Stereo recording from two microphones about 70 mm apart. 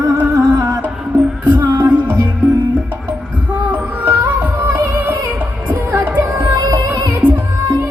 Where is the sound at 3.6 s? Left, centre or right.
Right.